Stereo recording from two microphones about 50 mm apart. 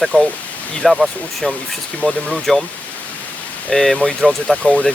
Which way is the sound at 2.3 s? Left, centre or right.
Centre.